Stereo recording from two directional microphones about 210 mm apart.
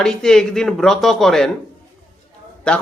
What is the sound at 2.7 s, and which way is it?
Speech, 5° left (ahead or behind).